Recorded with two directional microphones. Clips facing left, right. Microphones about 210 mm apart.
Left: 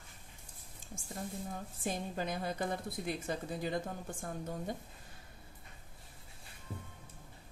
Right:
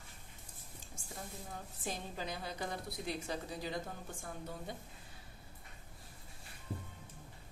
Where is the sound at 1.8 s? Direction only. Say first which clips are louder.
Left 5 dB; 50° left (ahead or behind).